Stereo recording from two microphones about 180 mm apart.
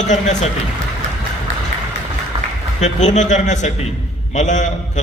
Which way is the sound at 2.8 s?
40° left (ahead or behind).